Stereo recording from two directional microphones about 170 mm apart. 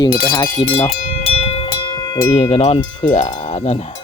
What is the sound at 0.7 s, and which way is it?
Music, 40° left (ahead or behind).